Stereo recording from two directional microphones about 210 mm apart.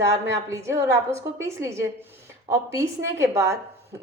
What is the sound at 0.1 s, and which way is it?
A woman's voice, 15° right (ahead or behind).